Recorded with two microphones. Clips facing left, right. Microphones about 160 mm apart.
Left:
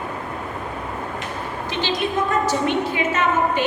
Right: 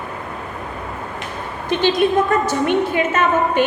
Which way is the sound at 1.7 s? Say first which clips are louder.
Right 8 dB; 55° right (ahead or behind).